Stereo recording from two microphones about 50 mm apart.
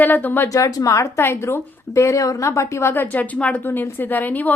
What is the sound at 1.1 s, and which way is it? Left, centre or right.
A woman's voice, left.